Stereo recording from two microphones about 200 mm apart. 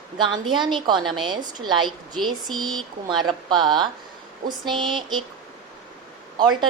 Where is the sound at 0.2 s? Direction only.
25° right (ahead or behind).